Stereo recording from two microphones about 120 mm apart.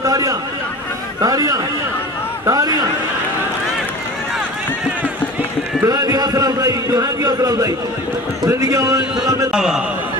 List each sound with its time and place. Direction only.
0.0 s chatter: 30° right (ahead or behind)
1.2 s speech: 30° right (ahead or behind)
5.9 s a man's voice: 35° right (ahead or behind)
9.5 s a man's voice: 5° right (ahead or behind)